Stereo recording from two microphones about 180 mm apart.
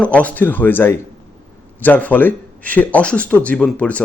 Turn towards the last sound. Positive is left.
turn(degrees=5)  # may be behind; listen again after turning